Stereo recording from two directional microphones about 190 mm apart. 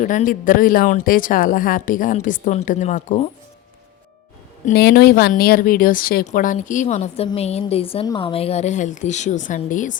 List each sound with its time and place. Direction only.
0.0 s speech: 45° left (ahead or behind)
4.7 s a woman's voice: 55° left (ahead or behind)